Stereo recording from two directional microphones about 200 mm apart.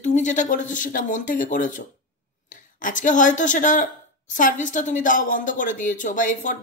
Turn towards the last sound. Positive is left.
turn(degrees=40)  # may be behind; listen again after turning